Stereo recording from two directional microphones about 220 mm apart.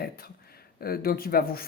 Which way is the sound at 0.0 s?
45° left (ahead or behind).